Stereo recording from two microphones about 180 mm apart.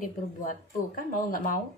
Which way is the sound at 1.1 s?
50° left (ahead or behind).